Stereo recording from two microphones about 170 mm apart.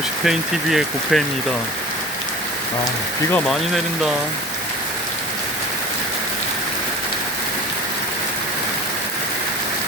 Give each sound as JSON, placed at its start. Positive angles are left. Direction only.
{"t": 0.3, "sound": "speech", "side_deg": 0}
{"t": 3.3, "sound": "speech", "side_deg": 5}